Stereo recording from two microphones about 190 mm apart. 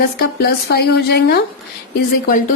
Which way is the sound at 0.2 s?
55° left (ahead or behind).